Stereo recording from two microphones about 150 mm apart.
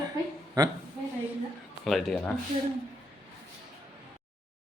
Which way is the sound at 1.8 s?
Centre (ahead or behind).